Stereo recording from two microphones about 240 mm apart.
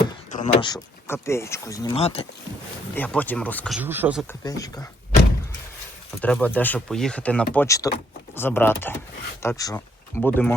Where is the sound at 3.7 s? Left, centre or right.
Centre.